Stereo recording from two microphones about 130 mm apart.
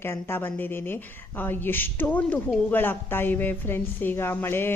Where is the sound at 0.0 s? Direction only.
15° left (ahead or behind).